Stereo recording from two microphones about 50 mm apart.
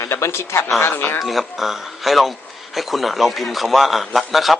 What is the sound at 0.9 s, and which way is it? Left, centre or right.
Speech, left.